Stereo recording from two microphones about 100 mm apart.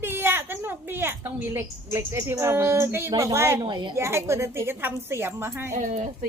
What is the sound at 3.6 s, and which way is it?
Speech, 50° right (ahead or behind).